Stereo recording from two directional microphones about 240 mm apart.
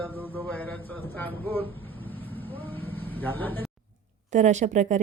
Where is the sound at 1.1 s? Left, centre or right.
Centre.